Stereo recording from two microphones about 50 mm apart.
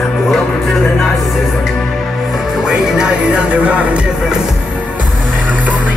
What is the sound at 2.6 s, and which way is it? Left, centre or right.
Music, centre.